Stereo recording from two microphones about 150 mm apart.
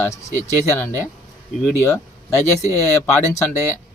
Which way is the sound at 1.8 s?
20° left (ahead or behind).